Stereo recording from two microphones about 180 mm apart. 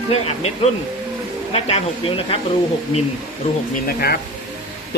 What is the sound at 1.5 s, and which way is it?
Speech, 35° left (ahead or behind).